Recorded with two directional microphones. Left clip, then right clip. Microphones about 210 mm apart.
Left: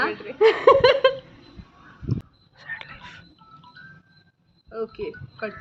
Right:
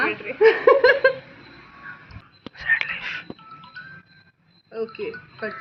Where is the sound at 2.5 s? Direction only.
10° left (ahead or behind).